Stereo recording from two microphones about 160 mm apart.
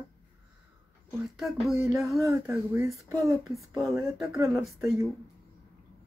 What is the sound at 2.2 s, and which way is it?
Speech, 20° right (ahead or behind).